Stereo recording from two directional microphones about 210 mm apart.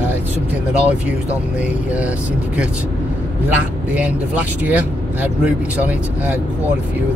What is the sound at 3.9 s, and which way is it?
Speech, 5° right (ahead or behind).